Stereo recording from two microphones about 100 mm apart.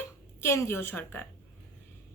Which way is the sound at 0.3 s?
25° left (ahead or behind).